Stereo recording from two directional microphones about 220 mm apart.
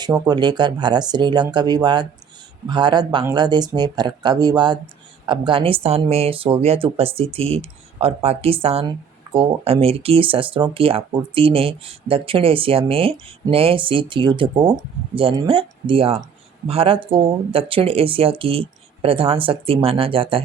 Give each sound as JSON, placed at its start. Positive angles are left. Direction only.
{"t": 0.0, "sound": "speech", "side_deg": -20}